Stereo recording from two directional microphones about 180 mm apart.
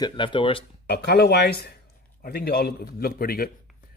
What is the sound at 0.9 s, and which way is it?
Speech, 65° left (ahead or behind).